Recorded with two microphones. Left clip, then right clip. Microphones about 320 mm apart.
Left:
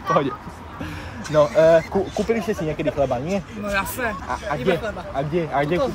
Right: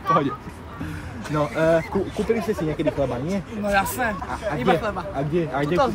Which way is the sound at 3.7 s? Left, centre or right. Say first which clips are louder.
Right 2 dB; centre.